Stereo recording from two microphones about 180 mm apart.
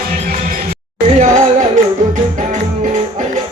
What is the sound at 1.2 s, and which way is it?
Music, 45° right (ahead or behind).